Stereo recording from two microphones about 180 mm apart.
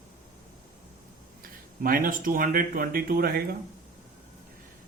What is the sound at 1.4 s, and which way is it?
Speech, 50° right (ahead or behind).